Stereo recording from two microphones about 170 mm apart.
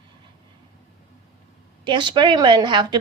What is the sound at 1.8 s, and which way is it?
Speech, 25° right (ahead or behind).